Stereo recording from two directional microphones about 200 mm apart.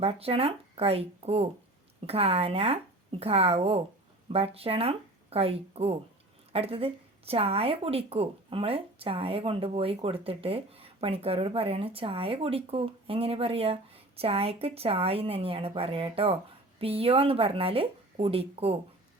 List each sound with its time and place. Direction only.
0.0 s speech: 30° right (ahead or behind)